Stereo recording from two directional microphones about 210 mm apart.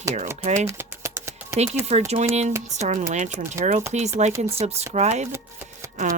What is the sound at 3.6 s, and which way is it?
Speech, 15° right (ahead or behind).